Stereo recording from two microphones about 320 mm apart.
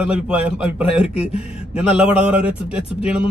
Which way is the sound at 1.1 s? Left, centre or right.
Centre.